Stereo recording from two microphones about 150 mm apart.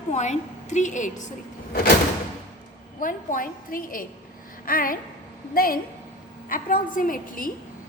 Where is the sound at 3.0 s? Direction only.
65° left (ahead or behind).